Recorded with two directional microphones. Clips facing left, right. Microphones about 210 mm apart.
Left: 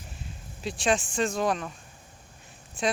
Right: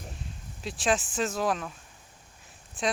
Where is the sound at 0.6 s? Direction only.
Centre (ahead or behind).